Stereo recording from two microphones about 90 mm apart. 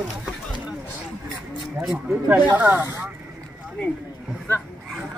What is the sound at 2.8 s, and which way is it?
Speech, 35° right (ahead or behind).